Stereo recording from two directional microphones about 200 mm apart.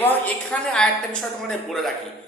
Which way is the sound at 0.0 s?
10° left (ahead or behind).